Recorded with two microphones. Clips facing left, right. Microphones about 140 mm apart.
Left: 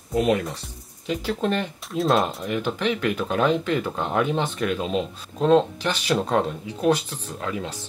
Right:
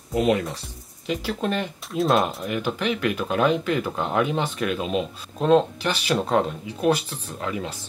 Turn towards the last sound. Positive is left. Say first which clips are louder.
# even
turn(degrees=-5)  # may be behind; listen again after turning